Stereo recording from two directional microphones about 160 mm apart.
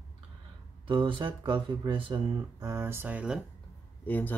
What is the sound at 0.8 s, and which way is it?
Speech, 30° right (ahead or behind).